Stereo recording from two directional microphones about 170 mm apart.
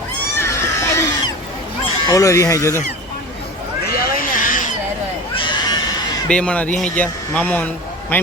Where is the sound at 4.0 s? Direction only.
50° left (ahead or behind).